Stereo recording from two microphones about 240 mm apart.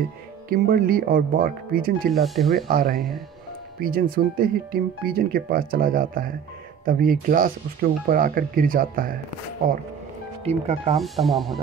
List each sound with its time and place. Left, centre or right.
0.5 s speech: right
2.2 s speech: centre
2.5 s speech: right
10.4 s speech: right
11.0 s speech: centre